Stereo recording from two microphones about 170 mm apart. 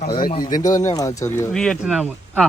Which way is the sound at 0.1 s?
25° left (ahead or behind).